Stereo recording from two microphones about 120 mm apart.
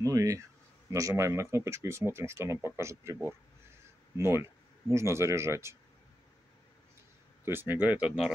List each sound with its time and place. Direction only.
0.0 s speech: 30° right (ahead or behind)
7.4 s speech: 15° right (ahead or behind)